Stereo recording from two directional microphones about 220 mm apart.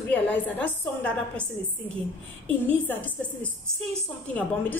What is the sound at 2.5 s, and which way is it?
A woman's voice, 10° left (ahead or behind).